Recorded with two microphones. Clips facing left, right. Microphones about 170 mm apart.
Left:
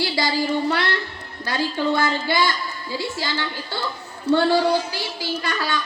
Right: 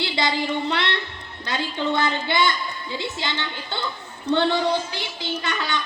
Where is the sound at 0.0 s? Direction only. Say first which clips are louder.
Left 2 dB; 20° right (ahead or behind).